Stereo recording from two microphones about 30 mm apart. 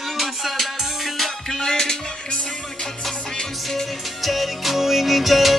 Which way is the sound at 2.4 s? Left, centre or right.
Centre.